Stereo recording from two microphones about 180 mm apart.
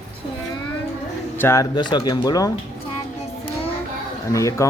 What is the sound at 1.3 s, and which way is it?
Speech, 15° left (ahead or behind).